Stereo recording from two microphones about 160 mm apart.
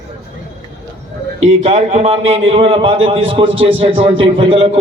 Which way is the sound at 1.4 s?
40° right (ahead or behind).